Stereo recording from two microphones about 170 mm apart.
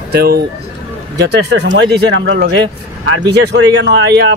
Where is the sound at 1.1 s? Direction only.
85° right.